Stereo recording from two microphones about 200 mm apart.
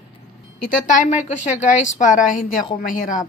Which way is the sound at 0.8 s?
40° left (ahead or behind).